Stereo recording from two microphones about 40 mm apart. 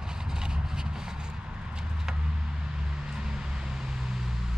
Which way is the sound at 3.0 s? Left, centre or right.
Centre.